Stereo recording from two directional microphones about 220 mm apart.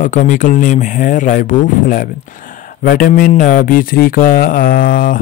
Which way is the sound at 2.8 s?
40° left (ahead or behind).